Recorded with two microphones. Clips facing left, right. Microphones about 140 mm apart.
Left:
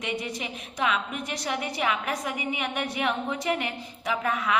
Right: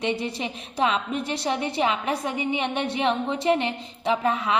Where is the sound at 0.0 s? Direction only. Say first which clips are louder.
Right 5 dB; 30° right (ahead or behind).